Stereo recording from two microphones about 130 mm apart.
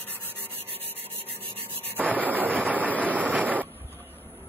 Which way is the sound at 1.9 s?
10° right (ahead or behind).